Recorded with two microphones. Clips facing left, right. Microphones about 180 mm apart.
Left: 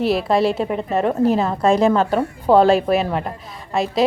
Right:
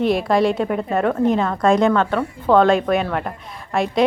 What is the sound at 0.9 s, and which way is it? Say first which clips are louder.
A woman's voice: left 1 dB; 30° left (ahead or behind).